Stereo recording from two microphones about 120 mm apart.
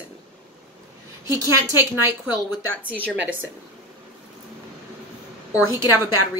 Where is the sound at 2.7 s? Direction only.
10° left (ahead or behind).